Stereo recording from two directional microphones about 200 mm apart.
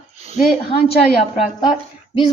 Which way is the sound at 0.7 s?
25° left (ahead or behind).